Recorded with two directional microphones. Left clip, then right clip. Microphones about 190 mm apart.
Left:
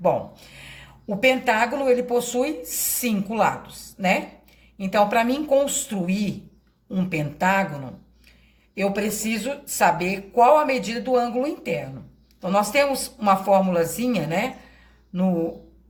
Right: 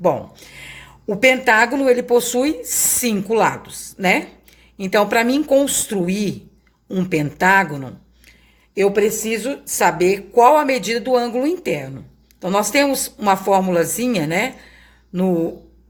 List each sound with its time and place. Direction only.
0.0 s speech: 50° right (ahead or behind)
8.7 s speech: 45° right (ahead or behind)